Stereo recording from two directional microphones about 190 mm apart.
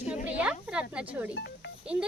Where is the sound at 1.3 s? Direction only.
65° left (ahead or behind).